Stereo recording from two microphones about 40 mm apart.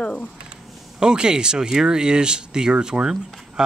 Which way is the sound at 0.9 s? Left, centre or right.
Right.